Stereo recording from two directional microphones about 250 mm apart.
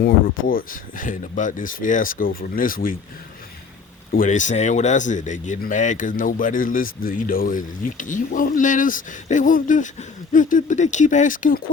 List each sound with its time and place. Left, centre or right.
0.0 s speech: left
4.1 s speech: left